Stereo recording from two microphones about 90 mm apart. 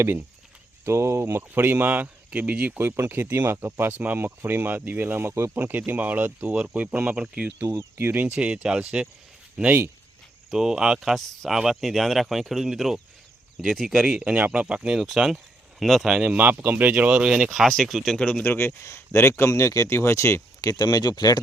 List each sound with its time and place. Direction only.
0.9 s speech: 30° right (ahead or behind); by 7.5 s 15° right (ahead or behind)
7.6 s speech: 30° right (ahead or behind)
8.0 s speech: 20° right (ahead or behind)
10.5 s speech: 5° right (ahead or behind)
16.4 s speech: 20° right (ahead or behind); by 18.2 s centre (ahead or behind)
18.2 s speech: 10° left (ahead or behind)
18.4 s speech: 25° left (ahead or behind)
20.7 s speech: 50° left (ahead or behind)